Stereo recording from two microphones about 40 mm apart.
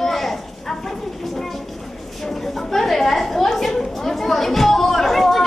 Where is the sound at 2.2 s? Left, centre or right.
Centre.